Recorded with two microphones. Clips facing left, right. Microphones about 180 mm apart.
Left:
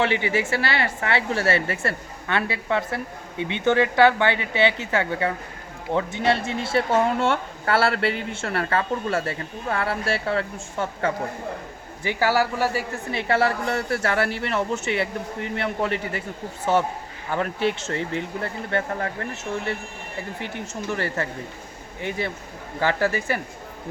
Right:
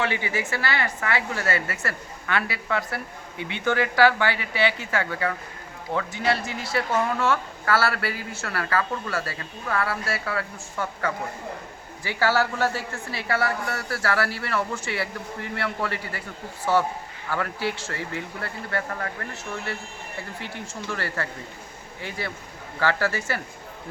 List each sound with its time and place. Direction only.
0.0 s a woman's voice: 20° left (ahead or behind)
12.0 s a woman's voice: 15° left (ahead or behind)
17.2 s a woman's voice: 20° left (ahead or behind)